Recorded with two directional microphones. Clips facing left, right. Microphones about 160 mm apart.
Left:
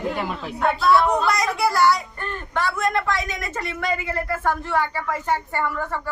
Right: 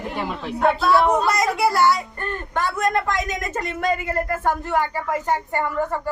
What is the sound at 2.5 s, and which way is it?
Speech, 45° right (ahead or behind).